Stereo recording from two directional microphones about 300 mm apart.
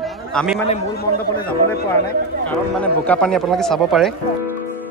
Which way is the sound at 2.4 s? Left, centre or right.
Centre.